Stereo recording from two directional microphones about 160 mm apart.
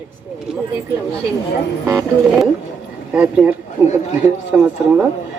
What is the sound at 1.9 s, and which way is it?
A woman's voice, 5° right (ahead or behind).